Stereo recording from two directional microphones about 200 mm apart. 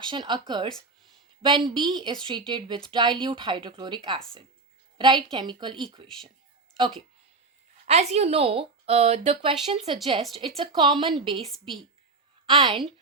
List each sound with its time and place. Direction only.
0.0 s speech: 25° right (ahead or behind)
7.9 s speech: 30° right (ahead or behind)